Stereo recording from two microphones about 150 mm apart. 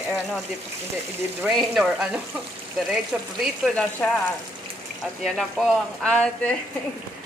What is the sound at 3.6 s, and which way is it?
Speech, 5° left (ahead or behind).